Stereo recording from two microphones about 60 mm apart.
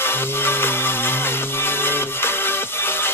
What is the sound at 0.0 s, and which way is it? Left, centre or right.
Music, left.